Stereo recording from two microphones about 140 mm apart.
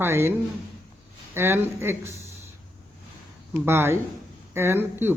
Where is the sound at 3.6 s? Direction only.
15° right (ahead or behind).